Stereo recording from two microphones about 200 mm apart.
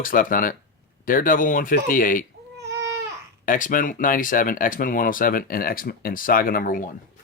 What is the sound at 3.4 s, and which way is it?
Speech, 40° left (ahead or behind).